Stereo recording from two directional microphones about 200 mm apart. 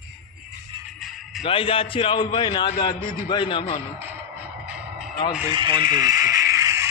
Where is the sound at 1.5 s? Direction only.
25° left (ahead or behind).